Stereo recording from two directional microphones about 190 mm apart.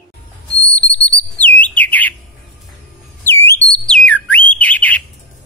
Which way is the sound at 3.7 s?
5° left (ahead or behind).